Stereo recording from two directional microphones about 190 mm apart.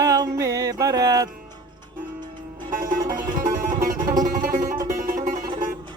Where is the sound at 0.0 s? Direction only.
20° right (ahead or behind).